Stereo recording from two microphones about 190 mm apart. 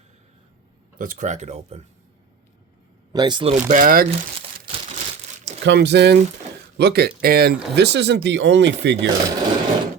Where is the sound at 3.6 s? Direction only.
45° right (ahead or behind).